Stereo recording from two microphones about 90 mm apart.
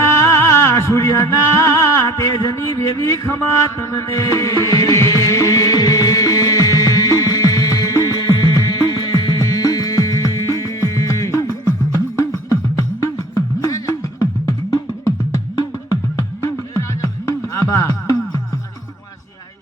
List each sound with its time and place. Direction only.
0.0 s music: 35° left (ahead or behind)
15.9 s music: 35° left (ahead or behind)